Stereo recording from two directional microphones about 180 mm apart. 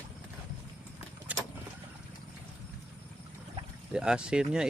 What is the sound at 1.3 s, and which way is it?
Vehicle, 10° right (ahead or behind).